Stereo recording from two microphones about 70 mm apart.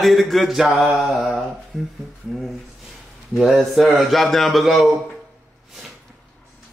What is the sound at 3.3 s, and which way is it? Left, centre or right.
Mantra, centre.